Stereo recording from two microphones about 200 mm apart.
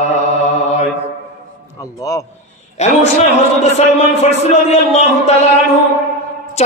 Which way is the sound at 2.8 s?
35° left (ahead or behind).